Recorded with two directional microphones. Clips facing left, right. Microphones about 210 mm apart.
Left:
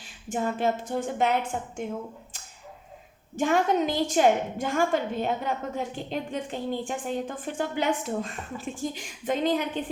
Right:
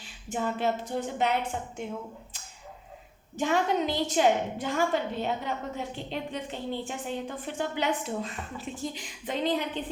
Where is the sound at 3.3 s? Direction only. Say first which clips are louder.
Left 3 dB; 50° left (ahead or behind).